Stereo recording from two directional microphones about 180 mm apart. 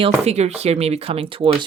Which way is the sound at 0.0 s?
35° right (ahead or behind).